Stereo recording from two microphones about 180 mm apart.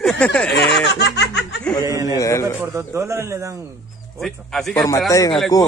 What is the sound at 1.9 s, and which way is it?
Speech, 20° right (ahead or behind).